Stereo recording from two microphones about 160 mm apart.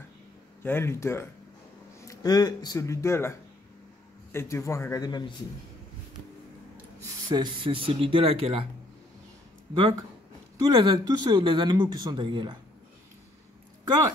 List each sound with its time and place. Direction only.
0.6 s speech: 15° left (ahead or behind)
7.2 s speech: 30° right (ahead or behind)
10.6 s speech: 30° right (ahead or behind)